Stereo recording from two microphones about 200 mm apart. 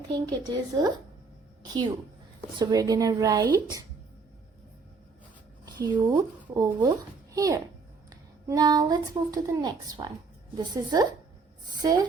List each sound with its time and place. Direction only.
0.4 s a woman's voice: 20° right (ahead or behind)
5.6 s speech: 20° right (ahead or behind)